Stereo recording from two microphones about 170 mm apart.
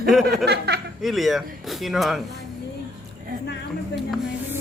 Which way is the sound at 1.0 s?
Centre (ahead or behind).